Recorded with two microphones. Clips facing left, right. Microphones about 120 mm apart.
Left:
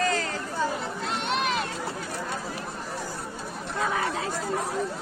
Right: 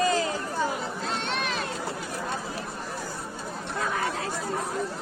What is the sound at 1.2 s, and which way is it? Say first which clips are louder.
Run: left 3 dB; 15° left (ahead or behind).